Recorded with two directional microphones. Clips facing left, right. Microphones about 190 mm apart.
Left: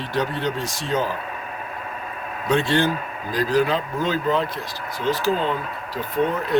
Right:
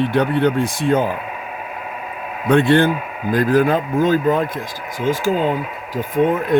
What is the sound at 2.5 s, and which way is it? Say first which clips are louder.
Speech: right 6 dB; 55° right (ahead or behind).